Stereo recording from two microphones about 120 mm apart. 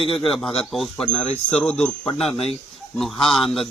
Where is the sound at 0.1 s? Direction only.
Centre (ahead or behind).